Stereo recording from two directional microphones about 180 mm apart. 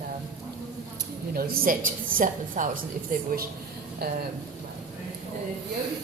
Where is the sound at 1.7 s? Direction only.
50° right (ahead or behind).